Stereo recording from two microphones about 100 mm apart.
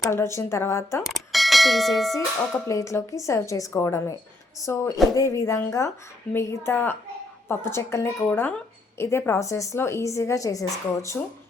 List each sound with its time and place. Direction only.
0.0 s a woman's voice: 30° left (ahead or behind)
1.0 s speech: centre (ahead or behind)
2.6 s a woman's voice: 30° left (ahead or behind)
6.7 s a woman's voice: 20° left (ahead or behind)